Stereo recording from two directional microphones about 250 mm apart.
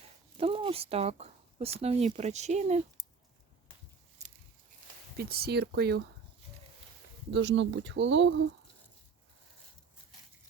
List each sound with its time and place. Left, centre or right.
0.3 s speech: right
5.1 s speech: right
7.3 s speech: right